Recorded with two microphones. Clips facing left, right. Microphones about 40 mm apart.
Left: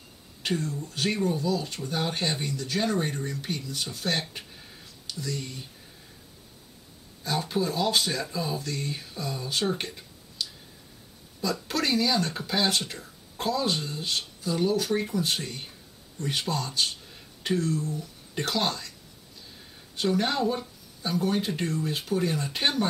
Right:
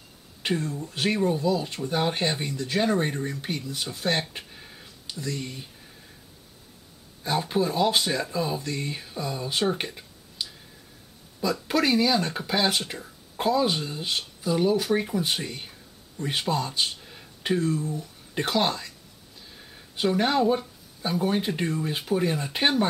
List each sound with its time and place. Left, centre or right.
0.4 s speech: centre
4.3 s a sound: centre
7.2 s speech: centre
11.6 s speech: centre
20.0 s speech: centre